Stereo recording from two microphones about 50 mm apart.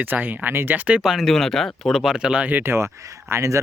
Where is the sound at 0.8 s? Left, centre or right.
Right.